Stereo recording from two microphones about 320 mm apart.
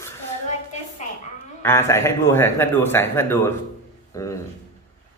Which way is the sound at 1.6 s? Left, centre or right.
Centre.